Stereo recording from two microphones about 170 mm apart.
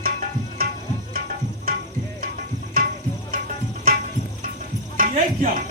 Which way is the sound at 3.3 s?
55° right (ahead or behind).